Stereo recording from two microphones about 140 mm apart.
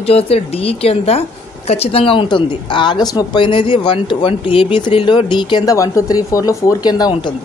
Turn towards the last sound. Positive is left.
turn(degrees=30)  # may be behind; listen again after turning